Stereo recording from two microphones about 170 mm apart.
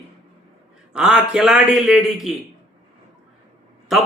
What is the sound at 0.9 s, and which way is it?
Speech, 5° right (ahead or behind).